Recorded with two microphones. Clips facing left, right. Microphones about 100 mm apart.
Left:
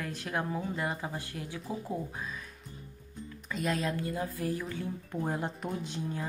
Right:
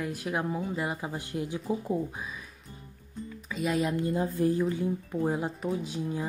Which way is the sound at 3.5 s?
5° right (ahead or behind).